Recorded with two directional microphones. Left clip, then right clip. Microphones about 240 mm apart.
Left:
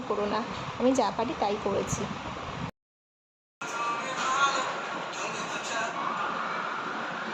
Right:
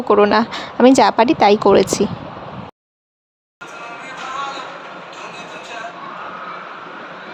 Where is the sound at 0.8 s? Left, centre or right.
Right.